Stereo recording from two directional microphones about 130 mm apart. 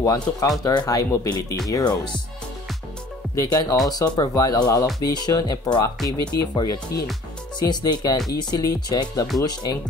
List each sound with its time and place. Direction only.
0.0 s speech: 25° left (ahead or behind)
3.3 s speech: 30° left (ahead or behind)
6.0 s speech: centre (ahead or behind)
6.5 s speech: 30° left (ahead or behind)